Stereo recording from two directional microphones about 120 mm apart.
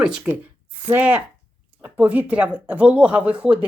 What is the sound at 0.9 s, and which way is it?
Speech, 15° right (ahead or behind).